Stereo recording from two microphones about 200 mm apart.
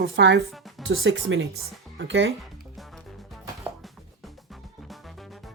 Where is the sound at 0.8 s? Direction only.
75° right (ahead or behind).